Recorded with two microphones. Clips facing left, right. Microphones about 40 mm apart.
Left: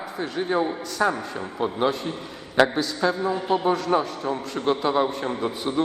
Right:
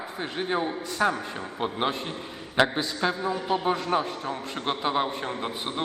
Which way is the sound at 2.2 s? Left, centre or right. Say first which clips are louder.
Left 3 dB; centre.